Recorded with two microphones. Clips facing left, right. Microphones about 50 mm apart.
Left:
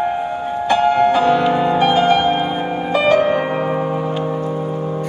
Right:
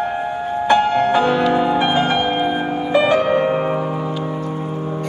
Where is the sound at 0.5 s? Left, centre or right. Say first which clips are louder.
Right 1 dB; centre.